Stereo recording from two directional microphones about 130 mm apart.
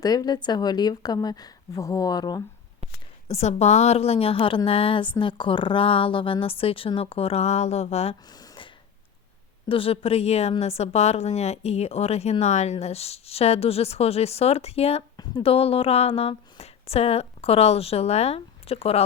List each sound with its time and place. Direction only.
0.0 s a woman's voice: 30° left (ahead or behind)
3.2 s a woman's voice: 55° left (ahead or behind)
8.3 s a sound: 30° left (ahead or behind)
9.6 s a woman's voice: 45° left (ahead or behind)
15.1 s a sound: 30° left (ahead or behind)
15.4 s a woman's voice: 50° left (ahead or behind)